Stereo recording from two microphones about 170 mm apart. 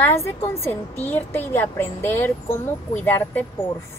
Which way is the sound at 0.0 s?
15° left (ahead or behind).